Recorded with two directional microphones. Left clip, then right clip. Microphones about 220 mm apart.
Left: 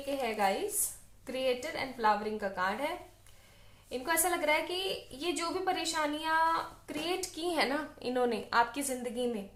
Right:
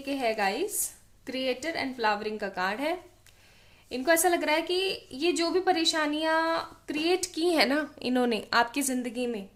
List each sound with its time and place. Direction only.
0.1 s a woman's voice: 50° right (ahead or behind)